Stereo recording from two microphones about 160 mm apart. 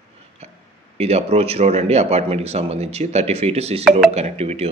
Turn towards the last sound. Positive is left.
turn(degrees=-40)  # may be behind; listen again after turning